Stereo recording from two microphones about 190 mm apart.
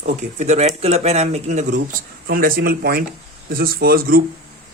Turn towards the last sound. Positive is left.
turn(degrees=-50)  # may be behind; listen again after turning